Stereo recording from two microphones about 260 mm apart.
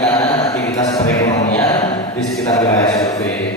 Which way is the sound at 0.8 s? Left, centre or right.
Centre.